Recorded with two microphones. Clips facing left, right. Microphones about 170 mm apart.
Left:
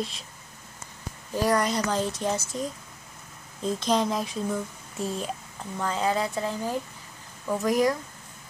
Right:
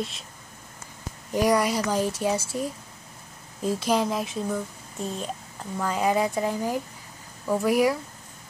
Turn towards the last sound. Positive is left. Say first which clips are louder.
# right 2 dB
turn(degrees=-10)  # may be behind; listen again after turning